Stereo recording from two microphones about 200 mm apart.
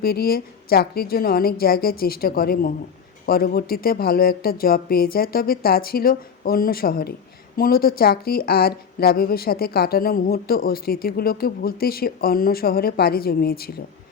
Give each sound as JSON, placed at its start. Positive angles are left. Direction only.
{"t": 0.0, "sound": "speech", "side_deg": 50}